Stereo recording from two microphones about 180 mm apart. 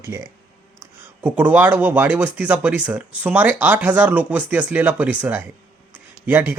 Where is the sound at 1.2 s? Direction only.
10° right (ahead or behind).